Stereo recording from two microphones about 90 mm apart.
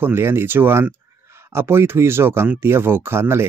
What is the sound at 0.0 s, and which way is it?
Speech, 25° right (ahead or behind).